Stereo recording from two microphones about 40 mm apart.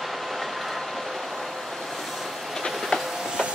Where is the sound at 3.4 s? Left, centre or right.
Centre.